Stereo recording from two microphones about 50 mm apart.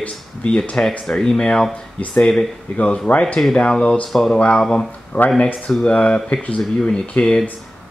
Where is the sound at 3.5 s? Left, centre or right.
Centre.